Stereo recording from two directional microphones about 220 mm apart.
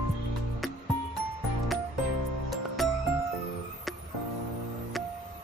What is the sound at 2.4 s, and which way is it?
Music, centre (ahead or behind).